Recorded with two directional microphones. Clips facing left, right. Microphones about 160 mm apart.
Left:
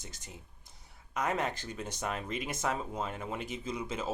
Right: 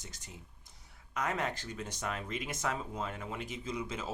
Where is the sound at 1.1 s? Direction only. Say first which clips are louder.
Left 2 dB; 25° left (ahead or behind).